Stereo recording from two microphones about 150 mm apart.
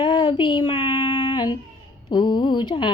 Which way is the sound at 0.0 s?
30° left (ahead or behind).